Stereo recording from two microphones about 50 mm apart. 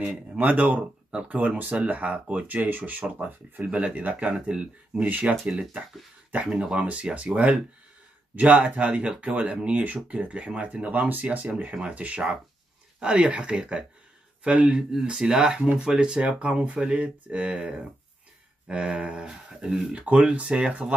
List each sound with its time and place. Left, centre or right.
0.0 s speech: right
2.4 s speech: right
3.6 s speech: right
5.3 s speech: centre
6.4 s speech: centre
8.4 s speech: right